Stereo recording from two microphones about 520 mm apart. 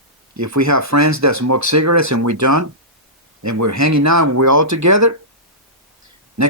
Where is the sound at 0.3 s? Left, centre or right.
Right.